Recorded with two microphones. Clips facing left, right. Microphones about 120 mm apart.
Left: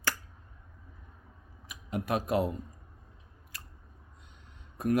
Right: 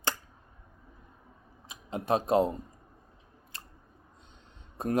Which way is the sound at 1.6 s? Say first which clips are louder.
Right 1 dB; 25° right (ahead or behind).